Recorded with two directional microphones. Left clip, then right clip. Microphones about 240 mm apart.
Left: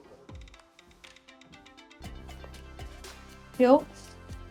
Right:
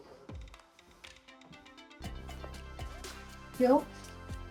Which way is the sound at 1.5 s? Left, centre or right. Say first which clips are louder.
Left 1 dB; centre.